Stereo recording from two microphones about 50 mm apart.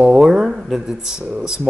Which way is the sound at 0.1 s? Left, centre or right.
Centre.